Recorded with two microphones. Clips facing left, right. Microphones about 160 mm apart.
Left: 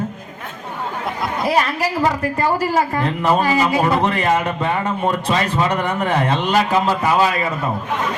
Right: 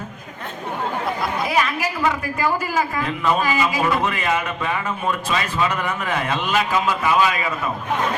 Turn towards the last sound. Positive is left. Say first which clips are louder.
# left 2 dB
turn(degrees=35)  # may be behind; listen again after turning